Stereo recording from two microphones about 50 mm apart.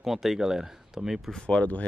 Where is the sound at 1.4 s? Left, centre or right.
Left.